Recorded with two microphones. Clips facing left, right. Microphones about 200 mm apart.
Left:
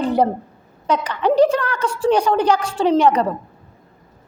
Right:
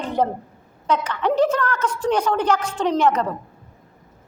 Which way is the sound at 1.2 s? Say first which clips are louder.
Left 5 dB; 35° left (ahead or behind).